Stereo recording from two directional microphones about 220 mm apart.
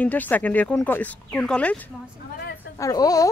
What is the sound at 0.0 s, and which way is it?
Speech, 5° left (ahead or behind).